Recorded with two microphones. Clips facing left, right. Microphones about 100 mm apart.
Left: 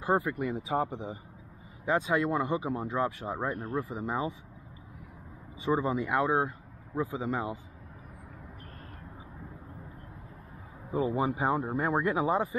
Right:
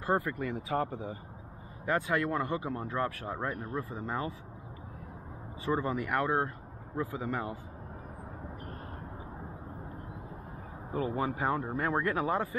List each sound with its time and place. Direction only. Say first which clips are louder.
0.0 s speech: left 2 dB; 15° left (ahead or behind)
5.6 s speech: left 3 dB; 15° left (ahead or behind)
10.9 s speech: left 3 dB; 20° left (ahead or behind)